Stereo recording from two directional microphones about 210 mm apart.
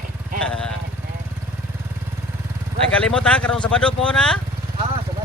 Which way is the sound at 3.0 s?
5° left (ahead or behind).